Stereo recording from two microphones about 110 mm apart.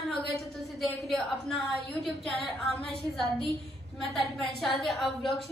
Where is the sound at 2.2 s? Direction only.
Centre (ahead or behind).